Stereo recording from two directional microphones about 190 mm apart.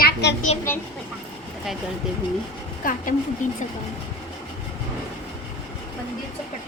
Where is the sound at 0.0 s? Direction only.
65° left (ahead or behind).